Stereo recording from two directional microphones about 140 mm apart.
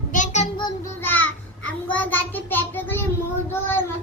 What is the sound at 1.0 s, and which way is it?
Child singing, 10° left (ahead or behind).